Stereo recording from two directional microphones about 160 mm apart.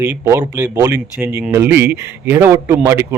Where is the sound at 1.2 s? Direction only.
10° right (ahead or behind).